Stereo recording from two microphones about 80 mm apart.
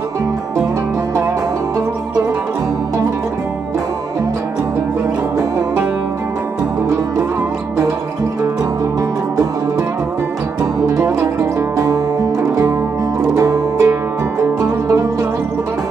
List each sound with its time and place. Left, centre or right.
10.6 s music: right